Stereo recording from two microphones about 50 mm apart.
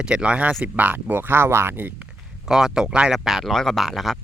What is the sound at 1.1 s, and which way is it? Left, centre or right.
Speech, right.